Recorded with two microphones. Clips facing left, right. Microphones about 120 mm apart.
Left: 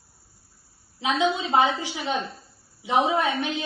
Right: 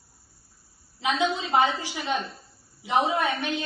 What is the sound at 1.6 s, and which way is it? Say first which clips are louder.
A woman's voice: left 1 dB; 15° left (ahead or behind).